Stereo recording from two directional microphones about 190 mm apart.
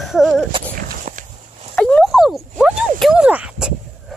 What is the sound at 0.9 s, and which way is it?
Walk, 45° right (ahead or behind).